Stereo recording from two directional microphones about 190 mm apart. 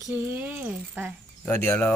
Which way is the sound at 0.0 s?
10° right (ahead or behind).